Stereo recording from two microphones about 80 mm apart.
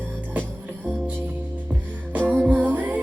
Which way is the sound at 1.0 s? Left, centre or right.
Right.